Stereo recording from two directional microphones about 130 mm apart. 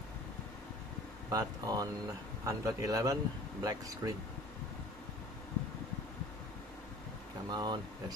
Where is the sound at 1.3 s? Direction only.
30° right (ahead or behind).